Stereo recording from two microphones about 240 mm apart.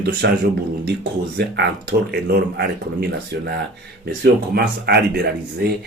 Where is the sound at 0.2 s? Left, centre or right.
Right.